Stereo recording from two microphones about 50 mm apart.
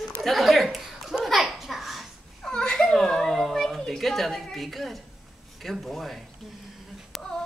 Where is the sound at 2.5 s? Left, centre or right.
Centre.